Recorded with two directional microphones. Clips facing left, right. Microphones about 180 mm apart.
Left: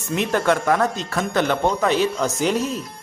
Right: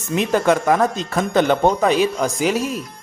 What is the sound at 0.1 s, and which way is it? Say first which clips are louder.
Speech: right 3 dB; 15° right (ahead or behind).